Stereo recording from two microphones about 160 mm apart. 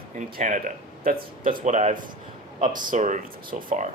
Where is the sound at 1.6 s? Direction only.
50° right (ahead or behind).